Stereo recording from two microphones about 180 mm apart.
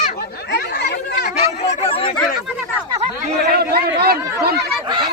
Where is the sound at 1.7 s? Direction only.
30° left (ahead or behind).